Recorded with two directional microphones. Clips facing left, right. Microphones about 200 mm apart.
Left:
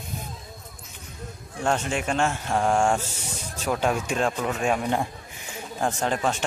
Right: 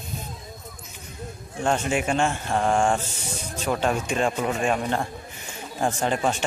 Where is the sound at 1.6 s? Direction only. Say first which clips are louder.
Right 2 dB; 5° right (ahead or behind).